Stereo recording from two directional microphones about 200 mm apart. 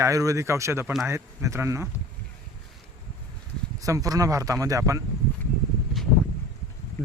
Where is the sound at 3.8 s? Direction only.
15° right (ahead or behind).